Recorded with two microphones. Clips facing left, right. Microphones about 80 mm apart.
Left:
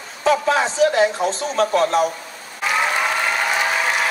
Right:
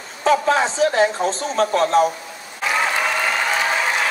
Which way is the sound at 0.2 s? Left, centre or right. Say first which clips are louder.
Right 1 dB; right.